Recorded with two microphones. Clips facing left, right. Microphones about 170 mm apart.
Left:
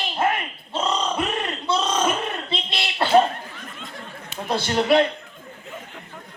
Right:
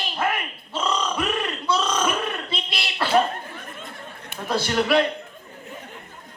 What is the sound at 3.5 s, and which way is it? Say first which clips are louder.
Chatter: even; 55° right (ahead or behind).